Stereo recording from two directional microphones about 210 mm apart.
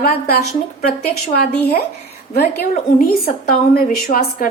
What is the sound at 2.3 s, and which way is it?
A woman's voice, 50° left (ahead or behind).